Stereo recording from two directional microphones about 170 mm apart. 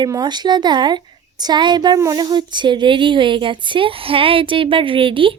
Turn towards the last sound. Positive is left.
turn(degrees=-30)  # may be behind; listen again after turning